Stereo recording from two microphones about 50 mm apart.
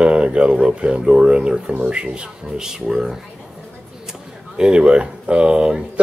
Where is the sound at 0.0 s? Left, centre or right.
Right.